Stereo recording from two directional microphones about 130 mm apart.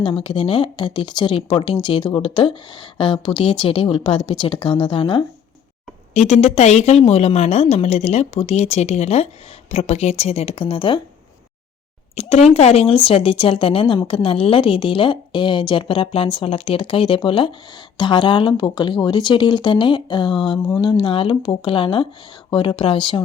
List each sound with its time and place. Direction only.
0.2 s speech: 45° left (ahead or behind)
6.1 s a woman's voice: 60° left (ahead or behind); by 11.0 s 40° left (ahead or behind)
12.1 s speech: 55° left (ahead or behind)